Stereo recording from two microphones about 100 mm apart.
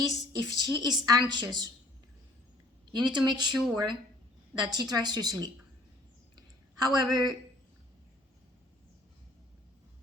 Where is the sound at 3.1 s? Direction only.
45° right (ahead or behind).